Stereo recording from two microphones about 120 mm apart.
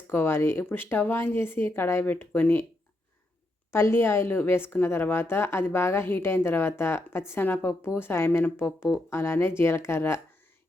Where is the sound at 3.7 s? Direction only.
20° left (ahead or behind).